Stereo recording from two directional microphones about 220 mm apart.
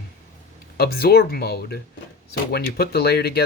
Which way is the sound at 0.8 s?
45° left (ahead or behind).